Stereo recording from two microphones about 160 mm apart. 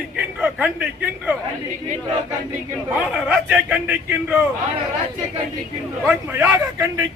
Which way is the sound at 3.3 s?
10° right (ahead or behind).